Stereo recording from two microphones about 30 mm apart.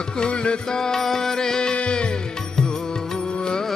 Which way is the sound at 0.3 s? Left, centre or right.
Left.